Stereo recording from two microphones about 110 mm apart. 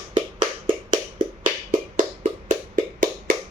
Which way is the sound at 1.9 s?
90° right.